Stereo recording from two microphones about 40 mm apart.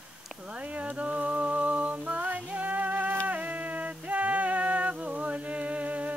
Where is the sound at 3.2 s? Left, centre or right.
Right.